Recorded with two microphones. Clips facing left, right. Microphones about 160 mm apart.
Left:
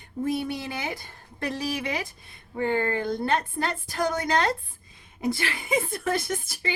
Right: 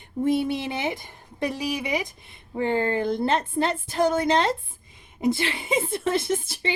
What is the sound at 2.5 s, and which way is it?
A woman's voice, 30° right (ahead or behind).